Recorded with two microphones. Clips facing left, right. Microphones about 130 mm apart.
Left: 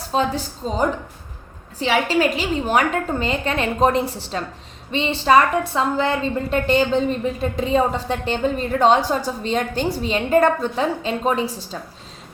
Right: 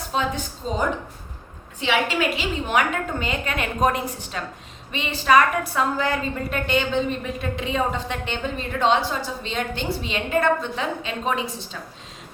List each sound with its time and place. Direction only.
0.1 s a woman's voice: 35° left (ahead or behind)